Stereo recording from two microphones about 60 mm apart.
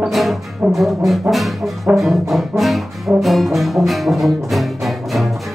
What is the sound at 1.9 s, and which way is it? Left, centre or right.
Brass instrument, centre.